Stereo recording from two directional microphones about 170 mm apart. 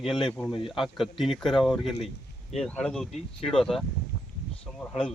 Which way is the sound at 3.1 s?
30° left (ahead or behind).